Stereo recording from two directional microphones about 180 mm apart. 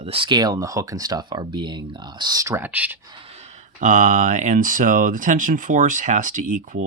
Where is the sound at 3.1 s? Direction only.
35° right (ahead or behind).